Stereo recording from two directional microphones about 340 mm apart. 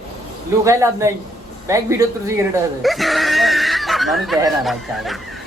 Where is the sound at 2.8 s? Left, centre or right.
Centre.